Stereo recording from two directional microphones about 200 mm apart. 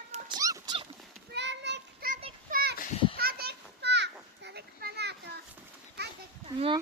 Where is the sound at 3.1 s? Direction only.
50° right (ahead or behind).